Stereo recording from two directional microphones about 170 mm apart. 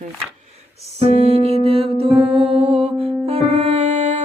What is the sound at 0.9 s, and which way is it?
Music, 40° right (ahead or behind).